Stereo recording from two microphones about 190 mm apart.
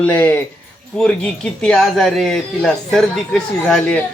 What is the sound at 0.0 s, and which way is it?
A man's voice, 10° left (ahead or behind).